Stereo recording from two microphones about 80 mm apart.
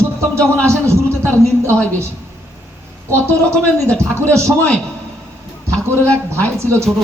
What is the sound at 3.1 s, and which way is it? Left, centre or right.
Speech, right.